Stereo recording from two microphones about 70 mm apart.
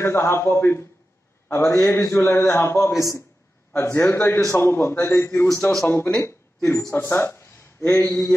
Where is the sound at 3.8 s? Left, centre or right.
Left.